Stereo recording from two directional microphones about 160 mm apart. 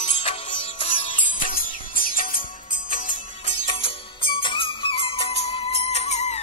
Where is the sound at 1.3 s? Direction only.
60° left (ahead or behind).